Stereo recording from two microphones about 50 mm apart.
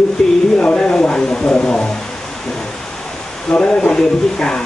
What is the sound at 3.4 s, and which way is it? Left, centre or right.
Speech, centre.